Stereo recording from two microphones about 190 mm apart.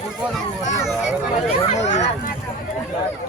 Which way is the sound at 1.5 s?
35° left (ahead or behind).